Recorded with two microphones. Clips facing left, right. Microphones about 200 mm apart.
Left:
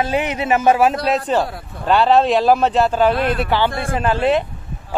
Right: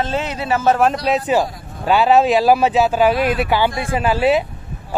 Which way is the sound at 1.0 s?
5° right (ahead or behind).